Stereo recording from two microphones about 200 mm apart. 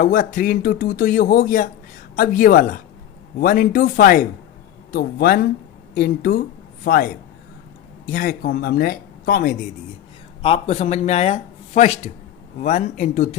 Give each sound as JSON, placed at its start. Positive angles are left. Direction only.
{"t": 0.0, "sound": "speech", "side_deg": 40}
{"t": 10.4, "sound": "speech", "side_deg": 30}